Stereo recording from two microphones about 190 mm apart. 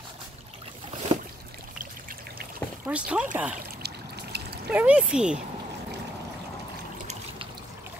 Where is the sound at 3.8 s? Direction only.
60° right (ahead or behind).